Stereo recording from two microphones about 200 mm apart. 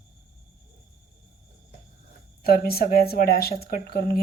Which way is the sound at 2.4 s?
50° left (ahead or behind).